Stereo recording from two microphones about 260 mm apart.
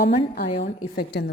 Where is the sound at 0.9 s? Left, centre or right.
Left.